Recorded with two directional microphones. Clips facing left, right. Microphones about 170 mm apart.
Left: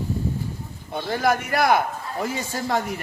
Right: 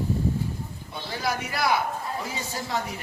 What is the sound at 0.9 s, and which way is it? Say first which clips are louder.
Speech: left 8 dB; 50° left (ahead or behind).